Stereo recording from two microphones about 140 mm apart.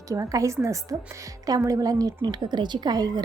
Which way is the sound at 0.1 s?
25° right (ahead or behind).